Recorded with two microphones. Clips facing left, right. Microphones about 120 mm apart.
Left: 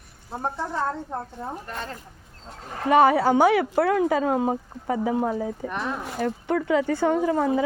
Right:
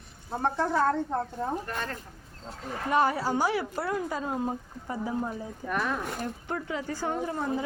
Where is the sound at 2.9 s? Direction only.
75° left (ahead or behind).